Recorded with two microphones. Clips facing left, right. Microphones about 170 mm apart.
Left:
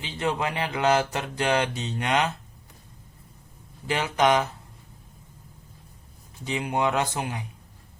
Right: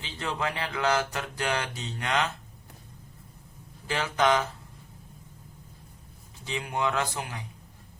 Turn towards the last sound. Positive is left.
turn(degrees=20)  # may be behind; listen again after turning